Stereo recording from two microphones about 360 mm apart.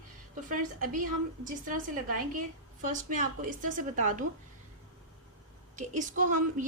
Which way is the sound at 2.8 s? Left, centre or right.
Right.